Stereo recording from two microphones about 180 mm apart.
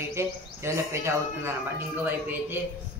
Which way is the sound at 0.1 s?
15° right (ahead or behind).